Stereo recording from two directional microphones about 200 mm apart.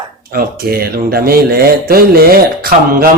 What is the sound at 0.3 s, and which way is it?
Speech, 45° right (ahead or behind).